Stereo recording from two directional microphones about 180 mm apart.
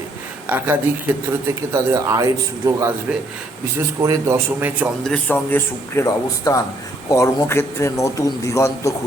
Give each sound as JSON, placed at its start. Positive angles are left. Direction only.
{"t": 0.4, "sound": "a man's voice", "side_deg": -10}
{"t": 4.0, "sound": "a man's voice", "side_deg": -15}
{"t": 5.0, "sound": "speech", "side_deg": 5}